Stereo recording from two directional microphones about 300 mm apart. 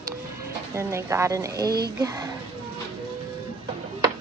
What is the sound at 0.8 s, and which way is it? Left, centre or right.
Speech, centre.